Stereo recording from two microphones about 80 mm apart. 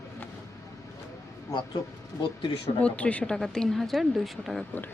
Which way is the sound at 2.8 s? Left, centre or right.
Centre.